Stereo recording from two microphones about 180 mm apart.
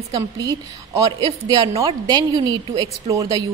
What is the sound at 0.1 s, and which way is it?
A woman's voice, 20° right (ahead or behind).